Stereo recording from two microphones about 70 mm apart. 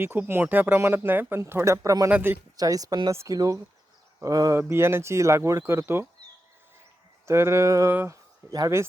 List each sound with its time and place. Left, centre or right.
0.0 s speech: right
1.4 s speech: right
3.1 s speech: right
4.5 s speech: right
7.3 s speech: right
8.1 s a sound: right